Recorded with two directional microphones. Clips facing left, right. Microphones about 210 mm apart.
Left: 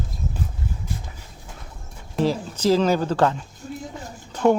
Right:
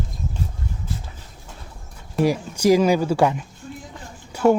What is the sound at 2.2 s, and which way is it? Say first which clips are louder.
Speech: right 2 dB; 10° right (ahead or behind).